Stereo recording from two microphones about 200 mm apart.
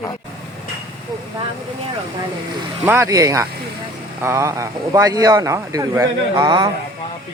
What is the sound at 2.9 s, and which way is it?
Speech, 15° right (ahead or behind).